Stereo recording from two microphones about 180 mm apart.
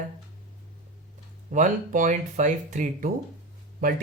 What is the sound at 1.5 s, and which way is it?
Speech, 45° right (ahead or behind).